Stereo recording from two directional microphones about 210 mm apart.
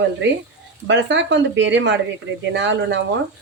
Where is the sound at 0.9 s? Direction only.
60° right (ahead or behind).